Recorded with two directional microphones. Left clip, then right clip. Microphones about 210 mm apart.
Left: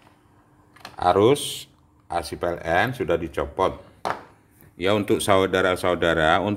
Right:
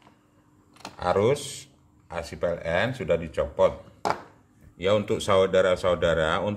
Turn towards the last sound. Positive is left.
turn(degrees=45)  # may be behind; listen again after turning